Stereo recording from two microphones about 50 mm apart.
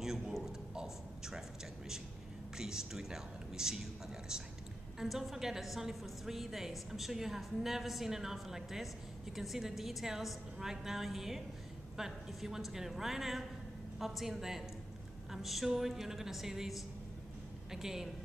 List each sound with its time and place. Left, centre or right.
0.7 s speech: centre
2.5 s a woman's voice: centre